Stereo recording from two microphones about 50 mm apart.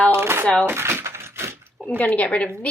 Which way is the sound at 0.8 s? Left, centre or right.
Right.